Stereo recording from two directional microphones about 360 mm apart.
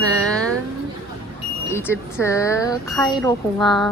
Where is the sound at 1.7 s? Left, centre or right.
Centre.